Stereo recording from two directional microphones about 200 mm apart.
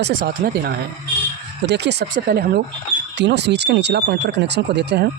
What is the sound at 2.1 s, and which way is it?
Speech, 45° right (ahead or behind).